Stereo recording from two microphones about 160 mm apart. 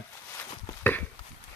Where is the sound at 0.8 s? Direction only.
10° left (ahead or behind).